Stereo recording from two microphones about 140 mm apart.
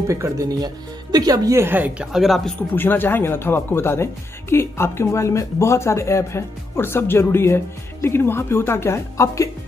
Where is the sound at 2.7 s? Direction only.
15° left (ahead or behind).